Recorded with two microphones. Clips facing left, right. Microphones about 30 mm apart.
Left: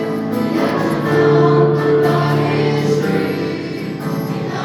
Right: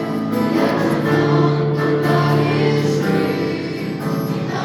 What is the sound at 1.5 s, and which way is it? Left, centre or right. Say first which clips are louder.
Music: left 7 dB; left.